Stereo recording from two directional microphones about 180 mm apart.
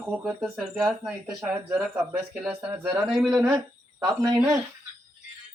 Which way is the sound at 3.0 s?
Centre (ahead or behind).